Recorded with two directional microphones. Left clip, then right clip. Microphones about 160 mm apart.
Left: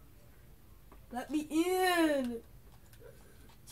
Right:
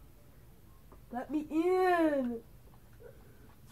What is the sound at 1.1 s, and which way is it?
Speech, 15° right (ahead or behind).